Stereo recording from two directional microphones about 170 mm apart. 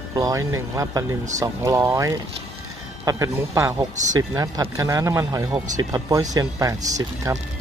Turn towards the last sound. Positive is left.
turn(degrees=-20)  # may be behind; listen again after turning